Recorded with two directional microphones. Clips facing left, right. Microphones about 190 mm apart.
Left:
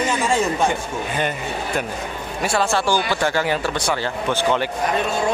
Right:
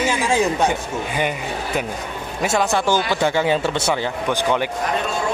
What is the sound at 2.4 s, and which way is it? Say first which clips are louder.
Speech: right 1 dB; 20° right (ahead or behind).